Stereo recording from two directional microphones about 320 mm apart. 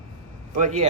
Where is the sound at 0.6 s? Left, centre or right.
Right.